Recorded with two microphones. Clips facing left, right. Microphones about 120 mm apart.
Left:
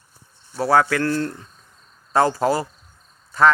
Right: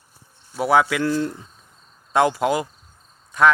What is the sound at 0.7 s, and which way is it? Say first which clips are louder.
Speech: even; 10° right (ahead or behind).